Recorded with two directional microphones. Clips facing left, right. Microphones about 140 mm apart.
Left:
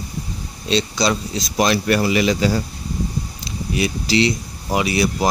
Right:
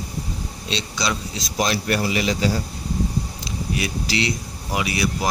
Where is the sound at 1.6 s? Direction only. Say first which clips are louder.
Left 5 dB; 75° left (ahead or behind).